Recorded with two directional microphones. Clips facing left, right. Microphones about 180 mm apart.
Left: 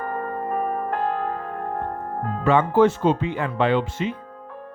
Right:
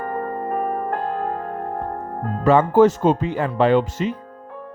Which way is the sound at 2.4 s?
40° right (ahead or behind).